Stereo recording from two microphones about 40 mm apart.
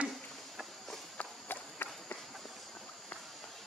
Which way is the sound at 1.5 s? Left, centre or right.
Left.